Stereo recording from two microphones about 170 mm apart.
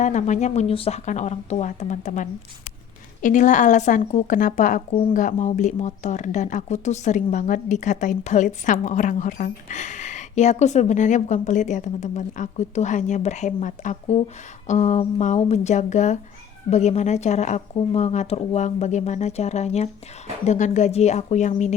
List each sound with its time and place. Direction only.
0.0 s speech: 45° left (ahead or behind)